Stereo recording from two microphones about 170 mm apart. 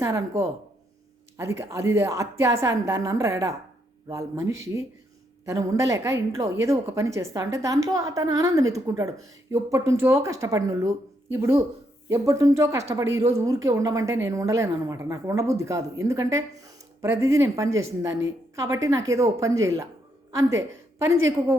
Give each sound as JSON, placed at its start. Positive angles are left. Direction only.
{"t": 0.0, "sound": "a woman's voice", "side_deg": -20}